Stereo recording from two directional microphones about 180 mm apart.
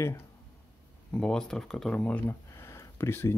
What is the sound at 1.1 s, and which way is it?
Speech, 5° left (ahead or behind).